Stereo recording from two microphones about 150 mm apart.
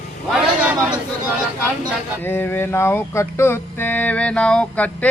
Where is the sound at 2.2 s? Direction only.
15° left (ahead or behind).